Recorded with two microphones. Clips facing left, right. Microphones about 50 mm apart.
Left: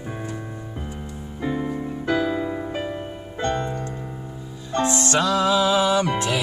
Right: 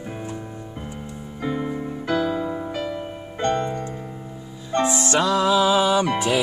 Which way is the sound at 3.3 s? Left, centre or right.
Right.